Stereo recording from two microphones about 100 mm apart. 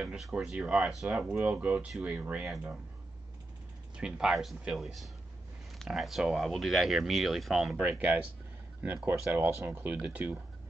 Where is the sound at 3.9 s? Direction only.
10° right (ahead or behind).